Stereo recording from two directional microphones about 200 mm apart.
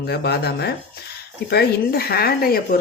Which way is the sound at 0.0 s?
55° left (ahead or behind).